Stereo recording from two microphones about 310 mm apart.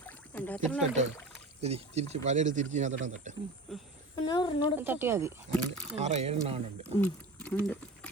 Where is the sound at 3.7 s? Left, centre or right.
Centre.